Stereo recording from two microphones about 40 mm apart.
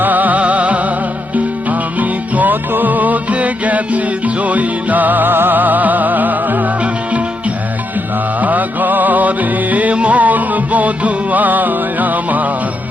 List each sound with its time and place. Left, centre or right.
0.0 s music: right
8.4 s music: right